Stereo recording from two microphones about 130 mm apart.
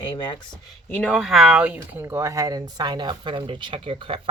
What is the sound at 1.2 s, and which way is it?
Speech, centre (ahead or behind).